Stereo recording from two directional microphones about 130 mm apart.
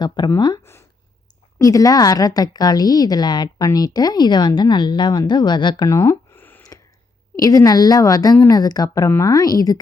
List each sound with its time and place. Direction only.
0.3 s a woman's voice: 35° left (ahead or behind)
0.6 s a sound: 20° left (ahead or behind)
1.5 s a woman's voice: 25° left (ahead or behind)
7.3 s a woman's voice: 25° left (ahead or behind)